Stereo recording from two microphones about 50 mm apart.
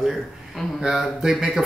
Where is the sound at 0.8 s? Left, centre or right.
Centre.